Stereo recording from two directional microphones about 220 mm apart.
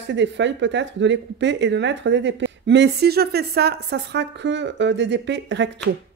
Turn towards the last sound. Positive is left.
turn(degrees=-55)  # may be behind; listen again after turning